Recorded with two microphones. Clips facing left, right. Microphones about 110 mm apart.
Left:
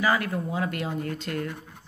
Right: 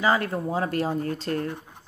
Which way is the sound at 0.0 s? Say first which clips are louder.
Right 2 dB; 30° right (ahead or behind).